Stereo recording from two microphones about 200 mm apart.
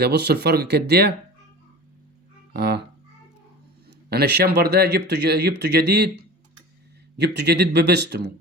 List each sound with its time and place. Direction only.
0.0 s speech: 55° right (ahead or behind)
2.5 s music: 55° right (ahead or behind)
3.8 s speech: 55° right (ahead or behind)